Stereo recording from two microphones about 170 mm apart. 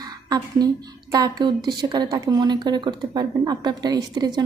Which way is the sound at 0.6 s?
25° right (ahead or behind).